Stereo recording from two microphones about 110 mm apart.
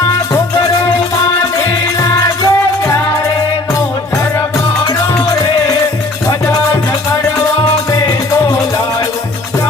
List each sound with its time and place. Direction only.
2.0 s music: 30° left (ahead or behind)